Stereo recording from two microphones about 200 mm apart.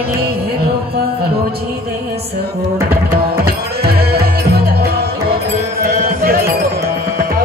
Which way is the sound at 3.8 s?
50° right (ahead or behind).